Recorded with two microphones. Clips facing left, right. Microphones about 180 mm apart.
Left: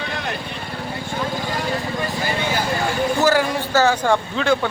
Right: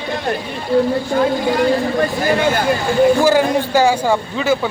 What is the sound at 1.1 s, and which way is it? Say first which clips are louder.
Speech: right 10 dB; 60° right (ahead or behind).